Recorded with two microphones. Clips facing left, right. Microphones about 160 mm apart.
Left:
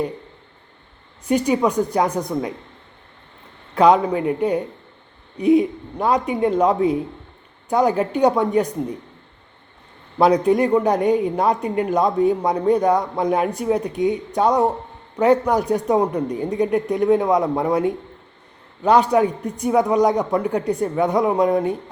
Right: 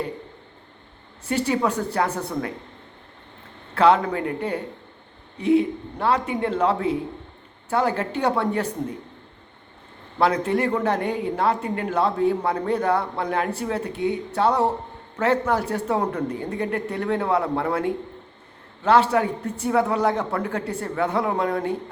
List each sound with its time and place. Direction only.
1.2 s a woman's voice: 15° left (ahead or behind)
3.8 s a woman's voice: 15° left (ahead or behind)
10.2 s a woman's voice: 15° left (ahead or behind)